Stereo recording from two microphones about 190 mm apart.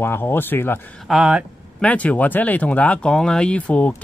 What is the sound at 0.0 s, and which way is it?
Speech, 10° left (ahead or behind).